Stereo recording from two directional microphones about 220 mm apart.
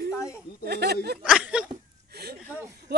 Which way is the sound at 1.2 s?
5° right (ahead or behind).